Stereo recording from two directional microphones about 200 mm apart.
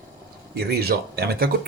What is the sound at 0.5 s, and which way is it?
Speech, 55° right (ahead or behind).